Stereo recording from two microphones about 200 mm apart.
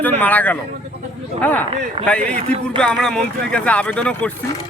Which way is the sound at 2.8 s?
5° left (ahead or behind).